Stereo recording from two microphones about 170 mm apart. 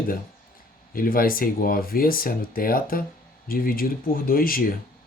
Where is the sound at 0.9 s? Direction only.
55° left (ahead or behind).